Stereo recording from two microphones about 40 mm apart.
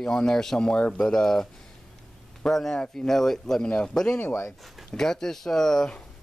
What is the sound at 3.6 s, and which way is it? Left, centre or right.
Speech, left.